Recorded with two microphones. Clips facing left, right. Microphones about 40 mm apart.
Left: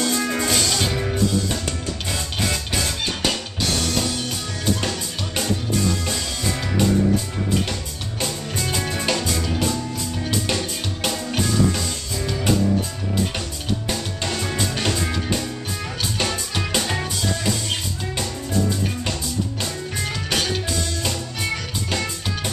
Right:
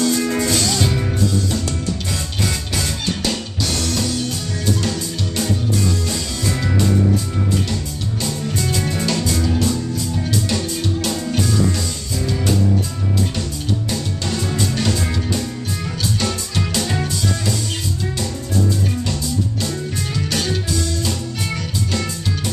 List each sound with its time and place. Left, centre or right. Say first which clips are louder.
0.0 s music: right 4 dB; centre
8.6 s music: right 1 dB; centre
10.5 s music: right 4 dB; left
13.8 s music: right 2 dB; left
20.2 s music: even; left